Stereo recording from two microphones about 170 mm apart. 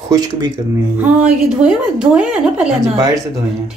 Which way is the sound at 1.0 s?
5° right (ahead or behind).